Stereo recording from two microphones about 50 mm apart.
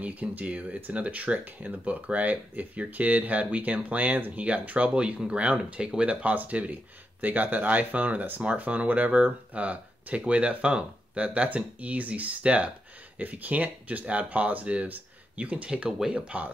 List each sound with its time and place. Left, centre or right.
0.0 s speech: right